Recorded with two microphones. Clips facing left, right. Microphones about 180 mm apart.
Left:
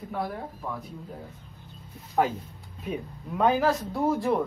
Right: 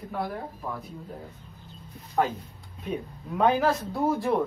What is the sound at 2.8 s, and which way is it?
Speech, centre (ahead or behind).